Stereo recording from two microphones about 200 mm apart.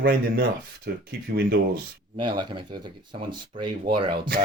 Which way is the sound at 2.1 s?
20° right (ahead or behind).